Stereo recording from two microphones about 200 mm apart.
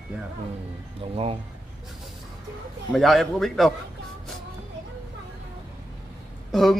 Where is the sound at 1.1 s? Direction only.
30° right (ahead or behind).